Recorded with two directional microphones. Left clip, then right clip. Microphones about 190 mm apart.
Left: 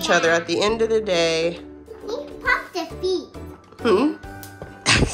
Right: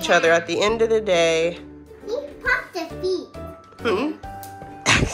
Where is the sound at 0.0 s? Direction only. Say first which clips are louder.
Right 1 dB; 10° left (ahead or behind).